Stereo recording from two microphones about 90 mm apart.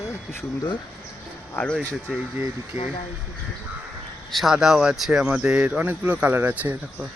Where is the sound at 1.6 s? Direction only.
25° left (ahead or behind).